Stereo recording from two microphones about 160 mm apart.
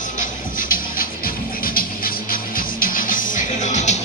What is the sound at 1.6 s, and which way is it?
Music, 65° left (ahead or behind).